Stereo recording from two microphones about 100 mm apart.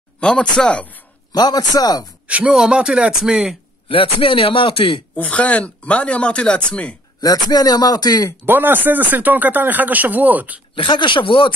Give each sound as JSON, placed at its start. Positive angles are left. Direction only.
{"t": 0.2, "sound": "speech", "side_deg": 10}
{"t": 1.3, "sound": "a man's voice", "side_deg": 45}
{"t": 2.2, "sound": "speech", "side_deg": -10}
{"t": 3.9, "sound": "a man's voice", "side_deg": 65}
{"t": 5.1, "sound": "speech", "side_deg": 15}
{"t": 7.2, "sound": "a man's voice", "side_deg": 40}
{"t": 8.5, "sound": "speech", "side_deg": -20}
{"t": 10.8, "sound": "a man's voice", "side_deg": 55}